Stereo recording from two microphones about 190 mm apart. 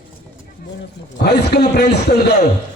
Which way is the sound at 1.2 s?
55° left (ahead or behind).